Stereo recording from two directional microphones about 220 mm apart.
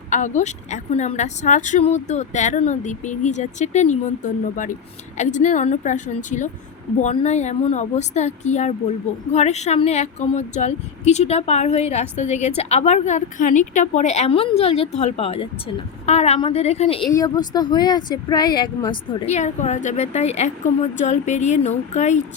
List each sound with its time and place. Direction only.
0.1 s a woman's voice: 35° left (ahead or behind)
17.1 s speech: 15° left (ahead or behind); by 22.2 s 30° left (ahead or behind)